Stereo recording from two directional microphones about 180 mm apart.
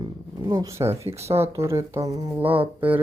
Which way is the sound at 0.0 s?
25° right (ahead or behind).